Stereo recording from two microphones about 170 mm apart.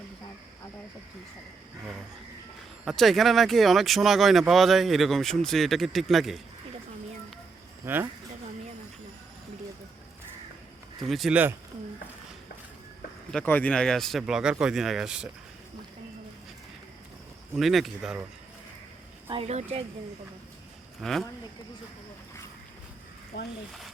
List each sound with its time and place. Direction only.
2.8 s speech: centre (ahead or behind)
7.9 s speech: 15° right (ahead or behind)
11.1 s speech: 5° right (ahead or behind)
13.3 s speech: 10° left (ahead or behind)
17.5 s speech: centre (ahead or behind)
19.3 s speech: 35° right (ahead or behind)
21.0 s speech: centre (ahead or behind)